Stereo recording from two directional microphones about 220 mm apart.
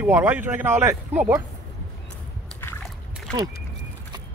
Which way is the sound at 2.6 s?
5° left (ahead or behind).